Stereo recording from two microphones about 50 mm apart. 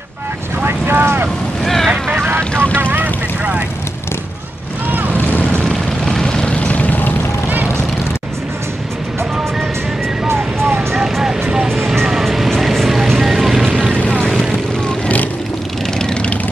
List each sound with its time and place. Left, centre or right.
0.7 s vehicle: right
1.6 s vehicle: centre
2.1 s vehicle: right
2.5 s vehicle: left
2.8 s vehicle: right
5.1 s boat: left
5.6 s vehicle: centre; by 7.2 s left
11.7 s vehicle: centre
12.1 s music: centre
12.4 s vehicle: centre
16.0 s vehicle: left